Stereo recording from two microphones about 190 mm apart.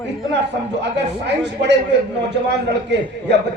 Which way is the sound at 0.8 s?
65° right (ahead or behind).